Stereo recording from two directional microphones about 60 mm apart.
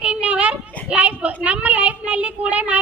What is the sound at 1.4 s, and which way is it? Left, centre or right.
Child singing, right.